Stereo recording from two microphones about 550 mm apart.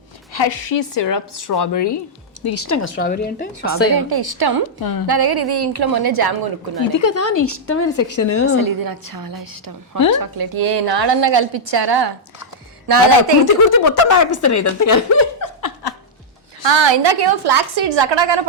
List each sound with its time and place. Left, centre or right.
0.3 s a woman's voice: left
1.3 s a woman's voice: left; by 3.5 s centre
3.9 s a woman's voice: right
4.8 s speech: left
5.0 s a woman's voice: right
7.0 s a woman's voice: left
8.5 s a woman's voice: right
13.4 s speech: left
15.6 s laughter: left
16.6 s a woman's voice: right